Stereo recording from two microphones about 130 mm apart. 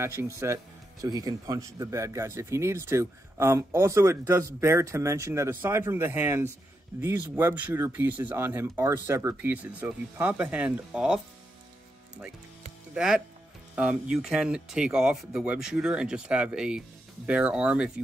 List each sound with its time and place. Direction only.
0.0 s speech: 20° right (ahead or behind)
12.9 s speech: 5° right (ahead or behind)